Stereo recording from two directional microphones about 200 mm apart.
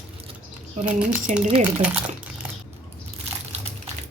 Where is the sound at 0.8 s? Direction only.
35° right (ahead or behind).